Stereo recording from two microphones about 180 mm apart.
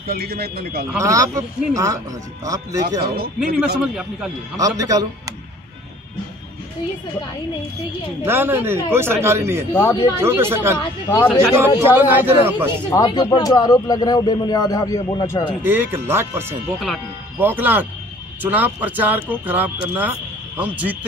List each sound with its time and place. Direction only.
0.0 s speech: 55° right (ahead or behind)
0.9 s a man's voice: 20° right (ahead or behind)
3.5 s a man's voice: 5° right (ahead or behind)
4.6 s a man's voice: 20° right (ahead or behind)
8.3 s speech: 10° right (ahead or behind)
9.8 s speech: 20° left (ahead or behind)
10.2 s speech: 15° right (ahead or behind)
12.9 s speech: 20° left (ahead or behind)
15.6 s speech: 10° right (ahead or behind)